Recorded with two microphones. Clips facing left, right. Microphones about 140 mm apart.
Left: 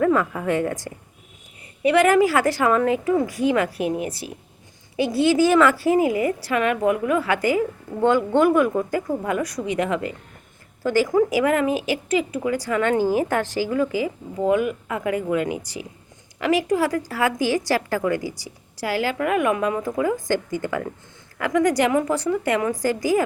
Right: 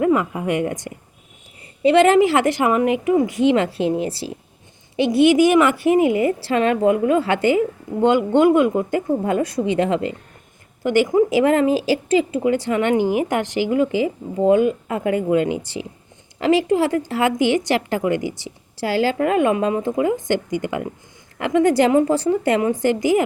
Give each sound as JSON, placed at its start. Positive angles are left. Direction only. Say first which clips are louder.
{"t": 0.0, "sound": "speech", "louder": "right 2 dB", "side_deg": -20}